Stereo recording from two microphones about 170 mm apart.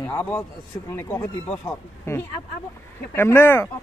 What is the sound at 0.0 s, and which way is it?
Speech, 10° left (ahead or behind).